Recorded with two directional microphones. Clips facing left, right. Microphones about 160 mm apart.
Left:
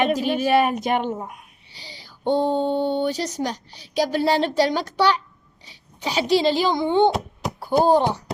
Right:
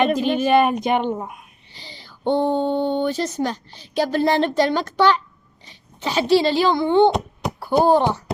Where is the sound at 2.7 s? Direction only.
15° right (ahead or behind).